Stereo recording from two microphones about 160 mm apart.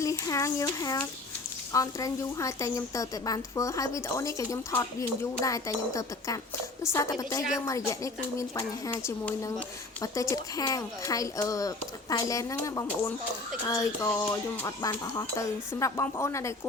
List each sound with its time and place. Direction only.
0.0 s a woman's voice: 20° left (ahead or behind)
13.7 s music: 20° left (ahead or behind)
14.8 s a woman's voice: 20° left (ahead or behind)